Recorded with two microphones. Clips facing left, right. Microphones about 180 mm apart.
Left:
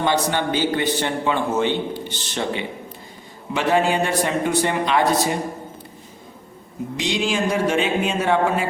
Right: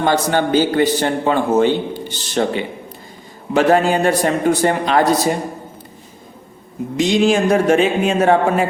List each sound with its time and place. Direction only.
0.0 s a man's voice: 45° right (ahead or behind)
6.9 s speech: 45° right (ahead or behind)